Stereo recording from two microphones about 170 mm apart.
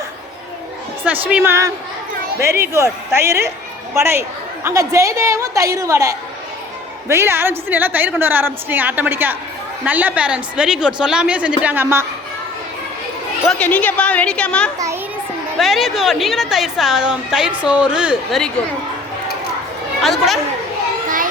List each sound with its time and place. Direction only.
1.1 s a woman's voice: 10° right (ahead or behind)
13.5 s a woman's voice: 10° left (ahead or behind)
20.0 s a woman's voice: centre (ahead or behind)